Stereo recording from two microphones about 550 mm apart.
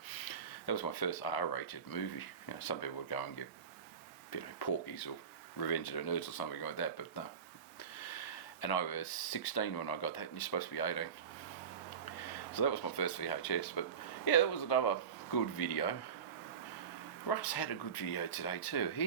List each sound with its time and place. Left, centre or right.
0.6 s speech: left
8.0 s speech: left
12.5 s speech: left
17.2 s speech: left